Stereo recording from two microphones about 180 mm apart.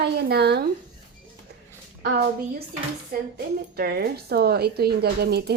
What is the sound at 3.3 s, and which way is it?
Speech, 60° right (ahead or behind).